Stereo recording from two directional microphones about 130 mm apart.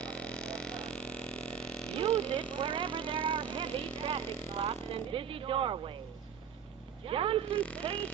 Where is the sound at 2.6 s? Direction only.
40° right (ahead or behind).